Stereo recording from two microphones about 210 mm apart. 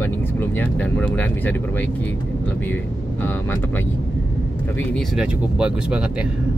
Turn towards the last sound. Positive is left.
turn(degrees=-5)  # may be behind; listen again after turning